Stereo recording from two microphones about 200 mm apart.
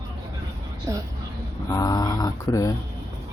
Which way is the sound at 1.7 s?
20° left (ahead or behind).